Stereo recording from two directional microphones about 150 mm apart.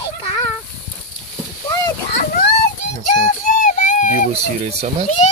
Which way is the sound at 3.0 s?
55° left (ahead or behind).